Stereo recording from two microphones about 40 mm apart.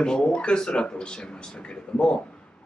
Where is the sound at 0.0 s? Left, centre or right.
Left.